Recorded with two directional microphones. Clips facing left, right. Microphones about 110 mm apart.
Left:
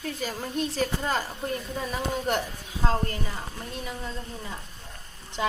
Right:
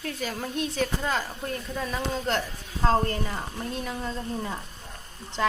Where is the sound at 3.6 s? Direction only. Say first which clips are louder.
Right 5 dB; centre (ahead or behind).